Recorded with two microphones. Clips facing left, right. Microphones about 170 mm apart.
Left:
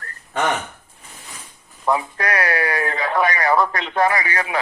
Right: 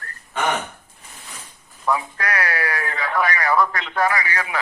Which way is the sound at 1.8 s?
25° left (ahead or behind).